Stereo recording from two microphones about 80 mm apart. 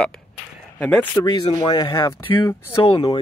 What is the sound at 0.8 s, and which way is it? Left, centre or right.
Speech, left.